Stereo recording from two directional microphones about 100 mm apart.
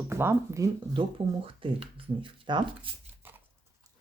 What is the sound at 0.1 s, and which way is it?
Speech, 25° right (ahead or behind).